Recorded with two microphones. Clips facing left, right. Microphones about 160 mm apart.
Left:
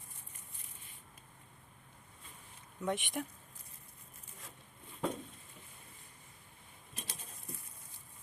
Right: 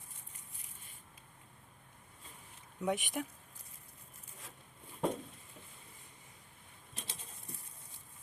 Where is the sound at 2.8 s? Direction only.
5° right (ahead or behind).